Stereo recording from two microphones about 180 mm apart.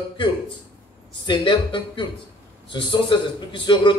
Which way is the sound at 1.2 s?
25° left (ahead or behind).